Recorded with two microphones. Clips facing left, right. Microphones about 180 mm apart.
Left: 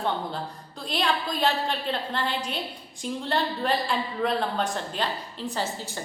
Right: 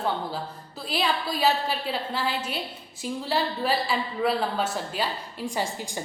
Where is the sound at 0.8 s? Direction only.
5° right (ahead or behind).